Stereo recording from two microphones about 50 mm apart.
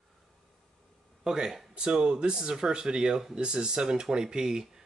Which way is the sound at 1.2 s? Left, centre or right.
Centre.